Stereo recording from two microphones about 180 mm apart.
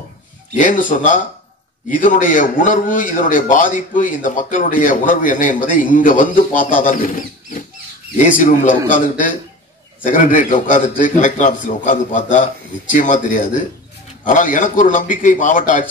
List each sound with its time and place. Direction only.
0.6 s a man's voice: 45° left (ahead or behind)
10.0 s a man's voice: 45° left (ahead or behind)